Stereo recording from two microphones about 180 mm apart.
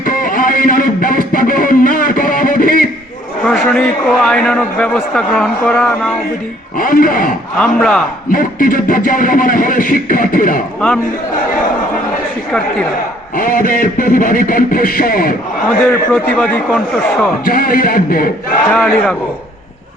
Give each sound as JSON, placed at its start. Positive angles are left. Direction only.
{"t": 0.0, "sound": "music", "side_deg": 50}
{"t": 3.4, "sound": "a man's voice", "side_deg": 5}
{"t": 6.7, "sound": "speech", "side_deg": 50}
{"t": 7.6, "sound": "a man's voice", "side_deg": 5}
{"t": 8.3, "sound": "speech", "side_deg": 50}
{"t": 10.8, "sound": "a man's voice", "side_deg": 5}
{"t": 13.3, "sound": "speech", "side_deg": 50}
{"t": 15.9, "sound": "a man's voice", "side_deg": 5}
{"t": 17.4, "sound": "speech", "side_deg": 55}
{"t": 18.7, "sound": "a man's voice", "side_deg": 5}